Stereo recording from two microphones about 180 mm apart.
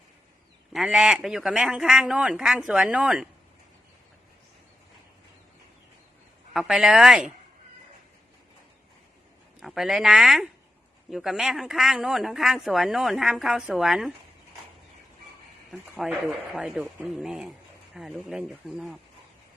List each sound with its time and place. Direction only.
0.7 s speech: centre (ahead or behind)
6.5 s speech: 5° right (ahead or behind)
9.6 s speech: centre (ahead or behind)
15.7 s speech: 5° right (ahead or behind)